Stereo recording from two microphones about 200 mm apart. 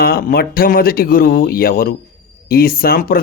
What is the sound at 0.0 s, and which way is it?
Speech, 45° left (ahead or behind).